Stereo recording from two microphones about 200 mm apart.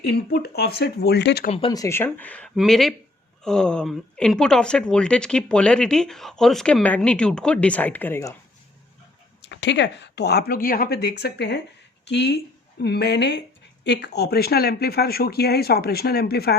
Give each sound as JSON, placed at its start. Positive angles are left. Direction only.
{"t": 0.1, "sound": "speech", "side_deg": 55}
{"t": 1.5, "sound": "speech", "side_deg": 20}
{"t": 9.4, "sound": "speech", "side_deg": 60}